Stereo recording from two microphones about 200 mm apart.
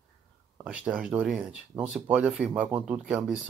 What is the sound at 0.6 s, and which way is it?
Speech, 5° right (ahead or behind).